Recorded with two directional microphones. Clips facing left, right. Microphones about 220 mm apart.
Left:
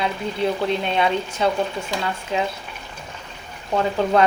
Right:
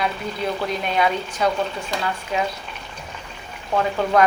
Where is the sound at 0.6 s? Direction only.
25° left (ahead or behind).